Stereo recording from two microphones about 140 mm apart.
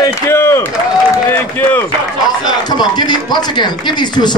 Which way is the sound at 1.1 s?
15° left (ahead or behind).